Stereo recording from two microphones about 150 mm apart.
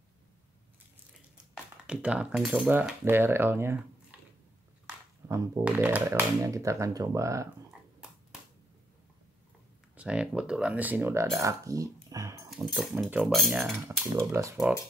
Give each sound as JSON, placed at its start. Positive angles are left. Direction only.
{"t": 1.5, "sound": "speech", "side_deg": -5}
{"t": 2.7, "sound": "speech", "side_deg": -10}
{"t": 5.2, "sound": "music", "side_deg": -15}
{"t": 5.6, "sound": "speech", "side_deg": -10}
{"t": 9.9, "sound": "speech", "side_deg": -5}
{"t": 12.4, "sound": "speech", "side_deg": 0}
{"t": 13.8, "sound": "speech", "side_deg": -15}